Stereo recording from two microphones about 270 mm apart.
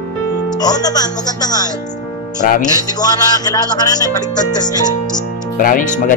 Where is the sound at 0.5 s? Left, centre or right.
Centre.